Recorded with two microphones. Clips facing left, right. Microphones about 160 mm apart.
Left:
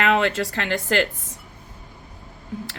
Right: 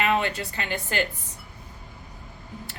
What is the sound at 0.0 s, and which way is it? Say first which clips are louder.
A woman's voice: left 4 dB; 90° left.